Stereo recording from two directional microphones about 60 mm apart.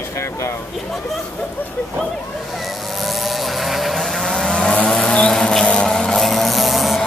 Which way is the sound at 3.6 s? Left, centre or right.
Centre.